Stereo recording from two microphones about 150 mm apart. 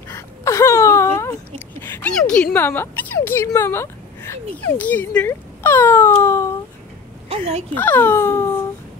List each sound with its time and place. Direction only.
0.1 s whimper: 20° left (ahead or behind)
1.8 s a woman's voice: 10° left (ahead or behind)
7.2 s speech: 45° right (ahead or behind)
7.7 s speech: 10° left (ahead or behind)